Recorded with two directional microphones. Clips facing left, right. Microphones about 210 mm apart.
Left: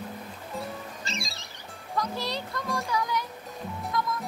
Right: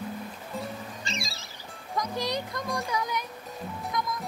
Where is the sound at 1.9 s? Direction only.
15° right (ahead or behind).